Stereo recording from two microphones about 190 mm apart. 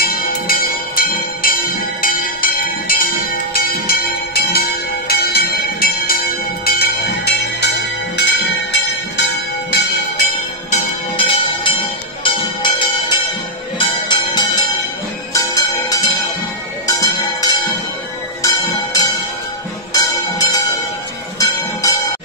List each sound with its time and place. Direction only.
0.0 s music: 50° left (ahead or behind)
10.7 s bell: 30° left (ahead or behind)
12.2 s music: 25° left (ahead or behind)
13.7 s bell: 25° left (ahead or behind)
15.3 s music: 20° left (ahead or behind)